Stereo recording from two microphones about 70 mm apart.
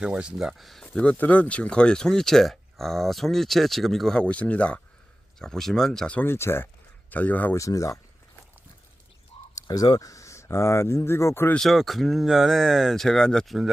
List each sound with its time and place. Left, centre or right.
0.0 s speech: centre
0.9 s speech: centre
5.4 s speech: centre
6.2 s speech: left
7.1 s speech: left
7.5 s speech: left
9.6 s speech: left
11.6 s speech: centre